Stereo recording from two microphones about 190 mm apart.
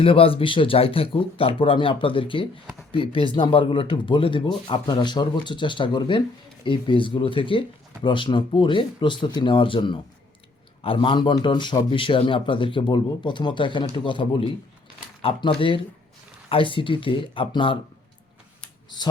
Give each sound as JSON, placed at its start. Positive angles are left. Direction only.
{"t": 0.0, "sound": "a man's voice", "side_deg": 30}